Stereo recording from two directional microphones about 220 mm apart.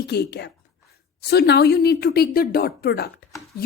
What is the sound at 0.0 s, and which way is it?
A woman's voice, 50° left (ahead or behind).